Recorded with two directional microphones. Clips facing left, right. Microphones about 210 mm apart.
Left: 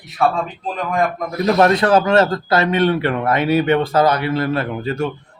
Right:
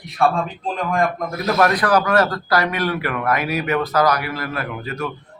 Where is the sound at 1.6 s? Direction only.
25° left (ahead or behind).